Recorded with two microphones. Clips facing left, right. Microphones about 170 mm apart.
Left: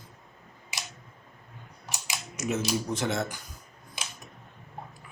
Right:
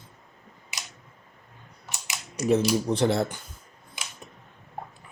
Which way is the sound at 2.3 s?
35° right (ahead or behind).